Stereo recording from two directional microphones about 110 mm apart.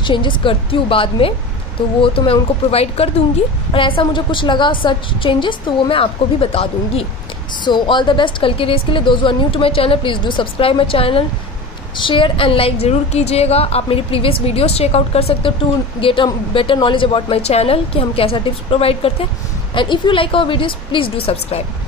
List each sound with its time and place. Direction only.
0.0 s a woman's voice: 45° left (ahead or behind); by 3.1 s 65° left (ahead or behind)
3.7 s a woman's voice: 50° left (ahead or behind)
7.6 s a woman's voice: 45° left (ahead or behind); by 15.5 s 65° left (ahead or behind)
16.0 s a woman's voice: 55° left (ahead or behind)
19.7 s a woman's voice: 50° left (ahead or behind); by 21.6 s 65° left (ahead or behind)